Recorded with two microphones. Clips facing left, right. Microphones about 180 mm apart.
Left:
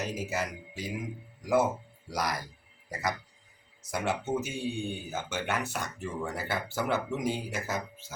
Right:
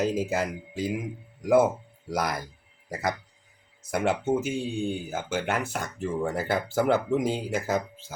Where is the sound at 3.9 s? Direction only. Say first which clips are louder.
Right 6 dB; 55° right (ahead or behind).